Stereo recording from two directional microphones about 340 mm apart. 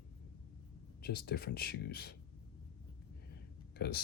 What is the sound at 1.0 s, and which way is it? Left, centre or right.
Speech, left.